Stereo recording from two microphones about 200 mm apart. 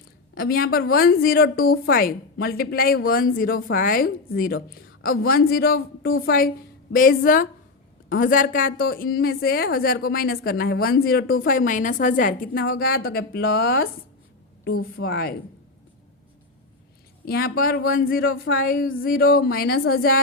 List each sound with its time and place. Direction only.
0.3 s a woman's voice: 50° left (ahead or behind)
17.2 s a woman's voice: 50° left (ahead or behind)